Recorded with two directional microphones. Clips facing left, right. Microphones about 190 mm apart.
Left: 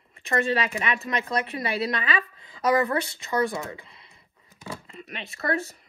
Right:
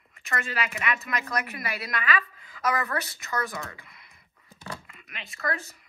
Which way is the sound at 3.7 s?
30° left (ahead or behind).